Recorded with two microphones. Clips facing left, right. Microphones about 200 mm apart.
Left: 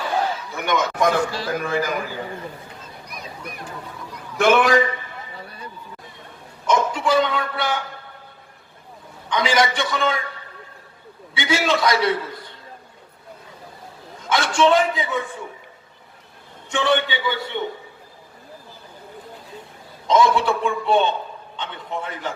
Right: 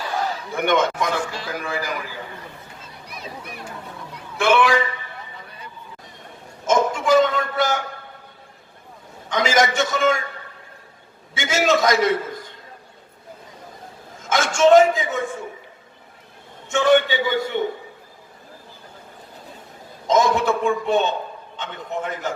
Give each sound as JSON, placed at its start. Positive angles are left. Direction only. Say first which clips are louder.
{"t": 0.5, "sound": "speech", "louder": "right 5 dB", "side_deg": -55}
{"t": 1.2, "sound": "a man's voice", "louder": "left 4 dB", "side_deg": 35}
{"t": 4.4, "sound": "a man's voice", "louder": "left 2 dB", "side_deg": 40}
{"t": 6.7, "sound": "a sound", "louder": "right 2 dB", "side_deg": -45}
{"t": 9.3, "sound": "a man's voice", "louder": "right 1 dB", "side_deg": -45}
{"t": 11.3, "sound": "a man's voice", "louder": "right 2 dB", "side_deg": -45}
{"t": 14.2, "sound": "a man's voice", "louder": "even", "side_deg": -45}
{"t": 16.7, "sound": "a man's voice", "louder": "right 4 dB", "side_deg": -45}
{"t": 20.1, "sound": "a man's voice", "louder": "even", "side_deg": -45}